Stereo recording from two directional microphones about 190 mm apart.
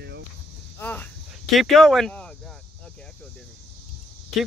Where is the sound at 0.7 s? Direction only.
10° left (ahead or behind).